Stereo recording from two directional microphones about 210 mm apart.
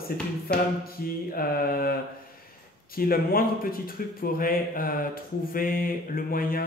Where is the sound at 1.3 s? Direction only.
45° left (ahead or behind).